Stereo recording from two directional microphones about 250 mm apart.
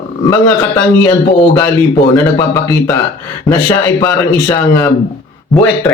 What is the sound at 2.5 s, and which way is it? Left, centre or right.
A man's voice, centre.